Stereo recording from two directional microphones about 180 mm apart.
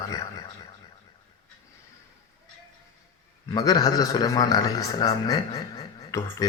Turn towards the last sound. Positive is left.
turn(degrees=20)  # may be behind; listen again after turning